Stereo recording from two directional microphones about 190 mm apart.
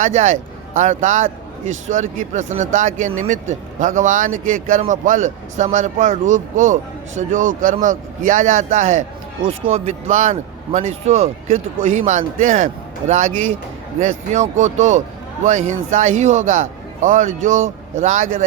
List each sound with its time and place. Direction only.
0.0 s speech: 35° right (ahead or behind)